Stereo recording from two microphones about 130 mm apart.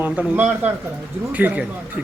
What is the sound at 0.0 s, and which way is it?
Speech, 15° right (ahead or behind).